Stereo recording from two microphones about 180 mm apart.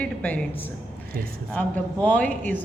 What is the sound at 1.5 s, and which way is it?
A woman's voice, 10° left (ahead or behind).